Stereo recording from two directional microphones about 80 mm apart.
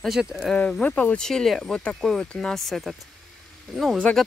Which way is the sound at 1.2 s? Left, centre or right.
Centre.